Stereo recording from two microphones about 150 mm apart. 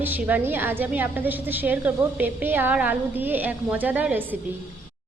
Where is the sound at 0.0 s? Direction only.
10° right (ahead or behind).